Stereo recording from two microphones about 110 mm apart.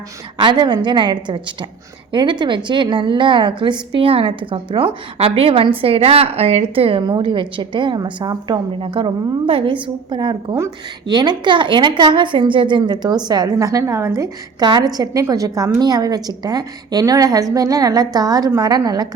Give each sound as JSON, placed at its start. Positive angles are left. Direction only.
{"t": 0.3, "sound": "a woman's voice", "side_deg": -45}
{"t": 8.8, "sound": "a woman's voice", "side_deg": -55}